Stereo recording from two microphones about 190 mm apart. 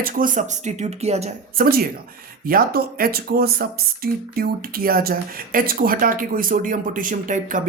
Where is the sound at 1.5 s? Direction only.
50° right (ahead or behind).